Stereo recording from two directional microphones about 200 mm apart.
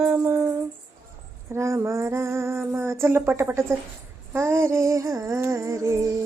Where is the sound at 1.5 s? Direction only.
15° right (ahead or behind).